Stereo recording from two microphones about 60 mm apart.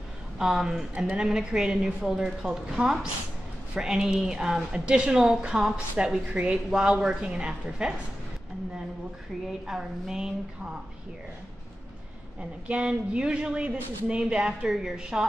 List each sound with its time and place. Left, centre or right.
0.4 s a woman's voice: centre
0.9 s a woman's voice: right
1.2 s speech: centre
2.0 s a woman's voice: centre
6.2 s a woman's voice: right
9.7 s speech: centre
12.4 s speech: centre
14.7 s a woman's voice: centre